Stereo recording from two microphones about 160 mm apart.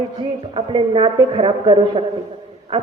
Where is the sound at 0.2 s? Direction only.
30° right (ahead or behind).